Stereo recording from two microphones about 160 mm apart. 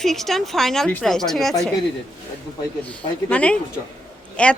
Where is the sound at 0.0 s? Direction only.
Centre (ahead or behind).